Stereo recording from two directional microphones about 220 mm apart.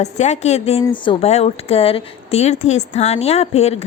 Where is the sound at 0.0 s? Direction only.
30° left (ahead or behind).